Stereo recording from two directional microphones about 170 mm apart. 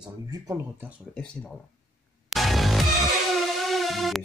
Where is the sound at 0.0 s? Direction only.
20° right (ahead or behind).